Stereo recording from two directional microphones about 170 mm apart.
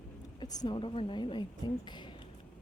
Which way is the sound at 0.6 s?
30° left (ahead or behind).